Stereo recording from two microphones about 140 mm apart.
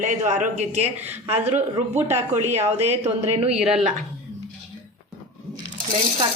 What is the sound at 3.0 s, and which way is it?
Speech, 45° right (ahead or behind).